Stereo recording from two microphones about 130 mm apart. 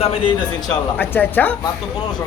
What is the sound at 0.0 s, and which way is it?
Speech, 45° left (ahead or behind).